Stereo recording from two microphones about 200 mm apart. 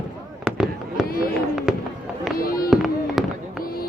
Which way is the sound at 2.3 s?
45° left (ahead or behind).